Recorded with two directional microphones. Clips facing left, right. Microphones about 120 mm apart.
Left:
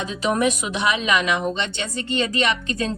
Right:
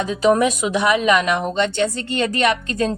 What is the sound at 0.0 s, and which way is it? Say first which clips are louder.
A woman's voice: right 5 dB; 40° right (ahead or behind).